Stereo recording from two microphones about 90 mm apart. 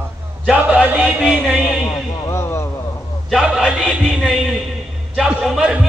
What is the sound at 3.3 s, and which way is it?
Music, 5° right (ahead or behind).